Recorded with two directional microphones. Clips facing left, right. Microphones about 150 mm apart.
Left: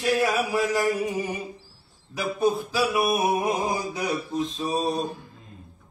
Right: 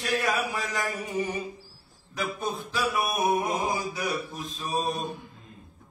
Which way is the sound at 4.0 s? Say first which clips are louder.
Left 5 dB; 20° left (ahead or behind).